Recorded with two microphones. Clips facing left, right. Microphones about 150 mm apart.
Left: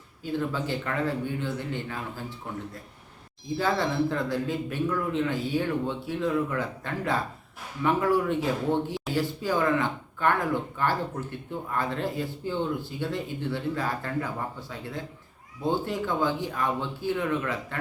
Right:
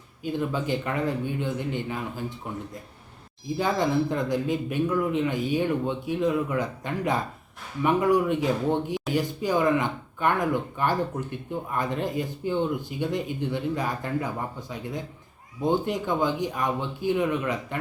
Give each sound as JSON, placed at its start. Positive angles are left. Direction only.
{"t": 0.3, "sound": "speech", "side_deg": -15}
{"t": 3.6, "sound": "speech", "side_deg": -15}